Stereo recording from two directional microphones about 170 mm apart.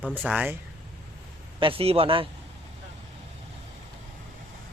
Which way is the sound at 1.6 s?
35° right (ahead or behind).